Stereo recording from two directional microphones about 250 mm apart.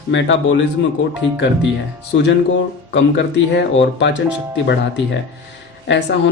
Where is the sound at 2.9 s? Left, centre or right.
Left.